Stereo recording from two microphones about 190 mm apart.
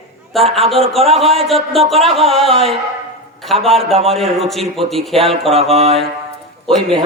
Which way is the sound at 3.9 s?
30° right (ahead or behind).